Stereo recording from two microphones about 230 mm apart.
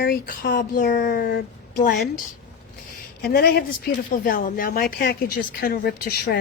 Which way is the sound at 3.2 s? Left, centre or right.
Left.